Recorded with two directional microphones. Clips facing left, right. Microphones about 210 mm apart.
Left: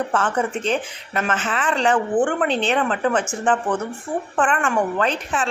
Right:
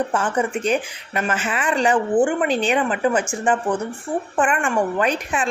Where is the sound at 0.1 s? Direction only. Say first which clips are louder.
Even; 10° right (ahead or behind).